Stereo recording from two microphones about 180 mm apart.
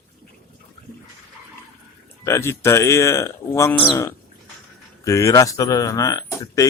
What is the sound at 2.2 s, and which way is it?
Speech, 15° left (ahead or behind).